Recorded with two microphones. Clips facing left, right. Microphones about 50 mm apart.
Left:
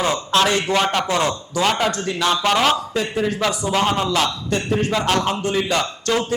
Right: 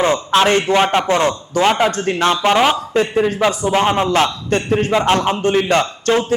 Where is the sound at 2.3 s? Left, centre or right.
Right.